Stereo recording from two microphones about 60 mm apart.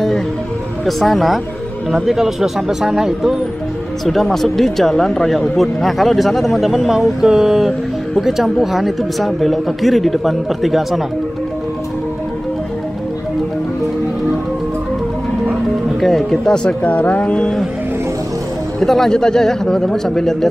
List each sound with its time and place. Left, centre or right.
0.8 s speech: centre
16.0 s speech: centre
16.8 s speech: left
18.8 s speech: centre